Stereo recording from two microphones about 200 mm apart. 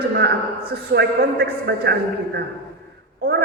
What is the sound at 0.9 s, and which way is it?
A man's voice, 55° right (ahead or behind).